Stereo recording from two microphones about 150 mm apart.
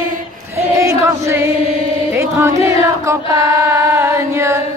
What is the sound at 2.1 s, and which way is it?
Music, 20° right (ahead or behind).